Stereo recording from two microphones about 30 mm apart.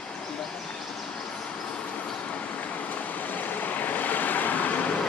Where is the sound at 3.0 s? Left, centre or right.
Left.